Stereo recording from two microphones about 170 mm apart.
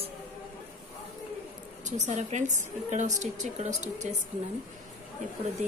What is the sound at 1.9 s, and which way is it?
A woman's voice, 45° right (ahead or behind).